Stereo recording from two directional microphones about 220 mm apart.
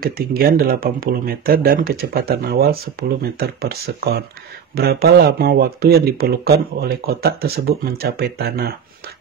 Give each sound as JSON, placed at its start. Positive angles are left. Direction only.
{"t": 0.0, "sound": "speech", "side_deg": -45}